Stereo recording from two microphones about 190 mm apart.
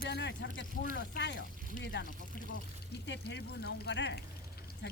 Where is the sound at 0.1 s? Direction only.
65° left (ahead or behind).